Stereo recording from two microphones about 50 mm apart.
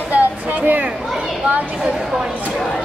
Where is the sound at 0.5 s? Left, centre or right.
Right.